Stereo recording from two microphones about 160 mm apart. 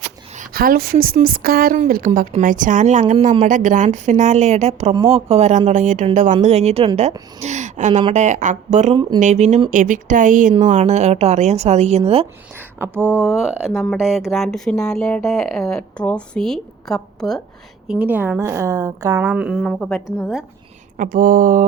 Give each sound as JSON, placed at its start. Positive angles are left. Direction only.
{"t": 0.5, "sound": "speech", "side_deg": -65}
{"t": 7.4, "sound": "a sound", "side_deg": -50}
{"t": 8.1, "sound": "speech", "side_deg": -50}
{"t": 9.0, "sound": "a woman's voice", "side_deg": -30}
{"t": 9.2, "sound": "speech", "side_deg": -45}
{"t": 12.5, "sound": "speech", "side_deg": -15}
{"t": 13.2, "sound": "speech", "side_deg": 0}
{"t": 17.8, "sound": "a woman's voice", "side_deg": -10}
{"t": 19.2, "sound": "speech", "side_deg": -5}
{"t": 21.0, "sound": "speech", "side_deg": -60}